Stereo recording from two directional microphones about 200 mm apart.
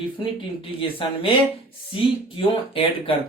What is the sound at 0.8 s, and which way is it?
Speech, 25° left (ahead or behind).